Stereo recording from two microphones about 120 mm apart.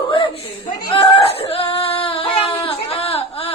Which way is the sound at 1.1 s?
55° left (ahead or behind).